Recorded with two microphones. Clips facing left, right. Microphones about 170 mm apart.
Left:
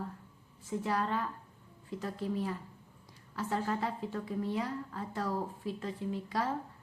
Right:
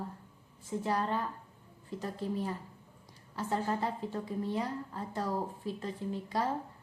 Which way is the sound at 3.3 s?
30° right (ahead or behind).